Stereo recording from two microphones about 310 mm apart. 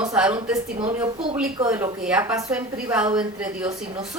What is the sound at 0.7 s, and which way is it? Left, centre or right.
A woman's voice, centre.